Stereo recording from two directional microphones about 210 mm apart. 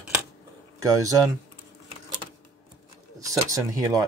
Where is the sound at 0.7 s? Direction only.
15° right (ahead or behind).